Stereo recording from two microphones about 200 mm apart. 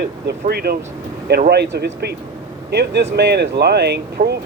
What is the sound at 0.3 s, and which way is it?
Speech, 50° right (ahead or behind).